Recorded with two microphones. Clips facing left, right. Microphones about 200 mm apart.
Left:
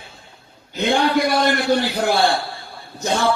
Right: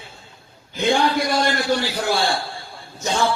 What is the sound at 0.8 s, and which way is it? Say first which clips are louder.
A man's voice: left 1 dB; 60° left (ahead or behind).